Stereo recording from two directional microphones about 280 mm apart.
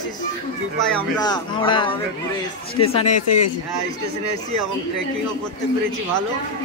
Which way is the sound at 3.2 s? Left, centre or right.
Left.